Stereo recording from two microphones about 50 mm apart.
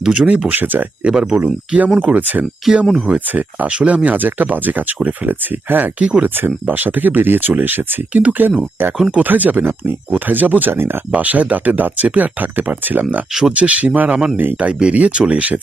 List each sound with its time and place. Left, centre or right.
0.0 s speech: centre
0.3 s speech: right
1.0 s speech: centre
1.5 s speech: right
2.6 s speech: centre
3.1 s speech: right
3.7 s speech: right
8.1 s speech: right
8.4 s speech: right
9.6 s speech: right
10.1 s speech: right
11.1 s speech: right
13.4 s speech: right